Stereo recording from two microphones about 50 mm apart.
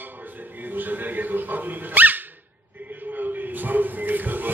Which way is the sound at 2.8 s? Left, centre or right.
Right.